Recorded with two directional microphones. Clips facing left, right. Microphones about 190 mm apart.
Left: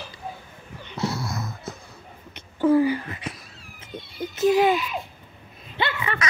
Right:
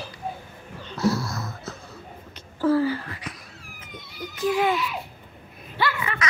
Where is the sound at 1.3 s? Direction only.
20° left (ahead or behind).